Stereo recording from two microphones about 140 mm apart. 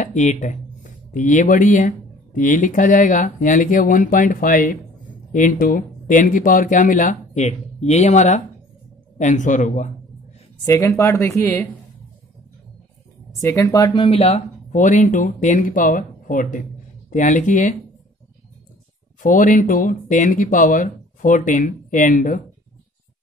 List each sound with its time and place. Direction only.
0.0 s speech: 60° left (ahead or behind); by 4.6 s 85° left
5.3 s a man's voice: 75° left (ahead or behind)
10.6 s speech: 20° left (ahead or behind)
13.4 s speech: 20° left (ahead or behind)
14.0 s speech: 45° left (ahead or behind)
14.7 s a man's voice: 60° left (ahead or behind)
19.2 s speech: 70° left (ahead or behind)